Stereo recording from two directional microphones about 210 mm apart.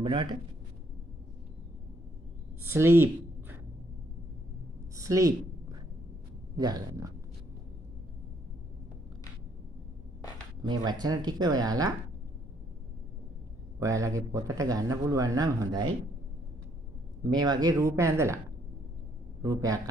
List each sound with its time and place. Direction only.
0.0 s speech: 20° right (ahead or behind)
2.6 s a woman's voice: 10° right (ahead or behind)
4.9 s a sound: 15° right (ahead or behind)
6.5 s speech: 20° right (ahead or behind)
10.7 s speech: 20° right (ahead or behind)
13.7 s speech: 15° right (ahead or behind)
17.2 s speech: 20° right (ahead or behind)